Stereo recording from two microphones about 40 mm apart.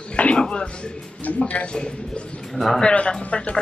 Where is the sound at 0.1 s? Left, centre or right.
Left.